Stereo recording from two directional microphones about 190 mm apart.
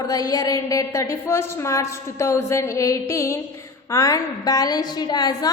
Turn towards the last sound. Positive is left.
turn(degrees=20)  # may be behind; listen again after turning